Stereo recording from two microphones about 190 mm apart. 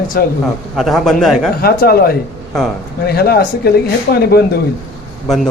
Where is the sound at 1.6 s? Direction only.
55° left (ahead or behind).